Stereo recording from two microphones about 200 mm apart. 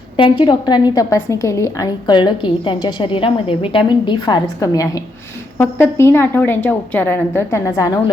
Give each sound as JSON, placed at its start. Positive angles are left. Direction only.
{"t": 0.2, "sound": "a woman's voice", "side_deg": 25}